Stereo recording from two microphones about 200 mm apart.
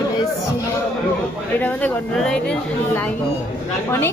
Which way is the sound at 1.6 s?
5° left (ahead or behind).